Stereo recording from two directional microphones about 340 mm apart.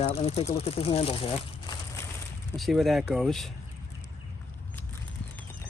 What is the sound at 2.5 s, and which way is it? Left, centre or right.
Speech, centre.